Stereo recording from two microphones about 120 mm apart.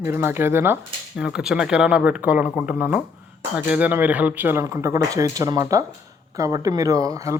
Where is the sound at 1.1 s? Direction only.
5° right (ahead or behind).